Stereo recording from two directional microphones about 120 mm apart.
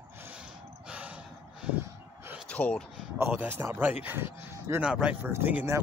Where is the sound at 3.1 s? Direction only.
15° right (ahead or behind).